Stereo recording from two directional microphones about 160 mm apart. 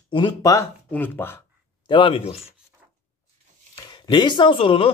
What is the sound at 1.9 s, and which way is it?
Speech, 30° left (ahead or behind).